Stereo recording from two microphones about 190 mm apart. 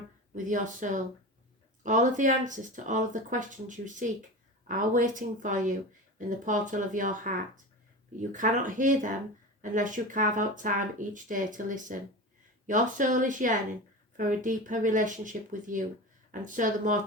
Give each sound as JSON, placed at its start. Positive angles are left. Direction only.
{"t": 0.3, "sound": "speech", "side_deg": -45}